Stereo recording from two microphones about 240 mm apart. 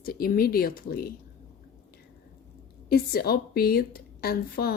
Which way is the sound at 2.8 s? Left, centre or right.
Left.